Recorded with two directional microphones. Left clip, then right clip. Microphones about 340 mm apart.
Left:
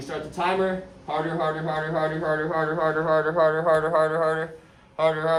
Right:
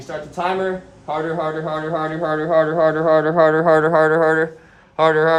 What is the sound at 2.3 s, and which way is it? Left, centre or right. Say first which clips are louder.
Speech: right 7 dB; right.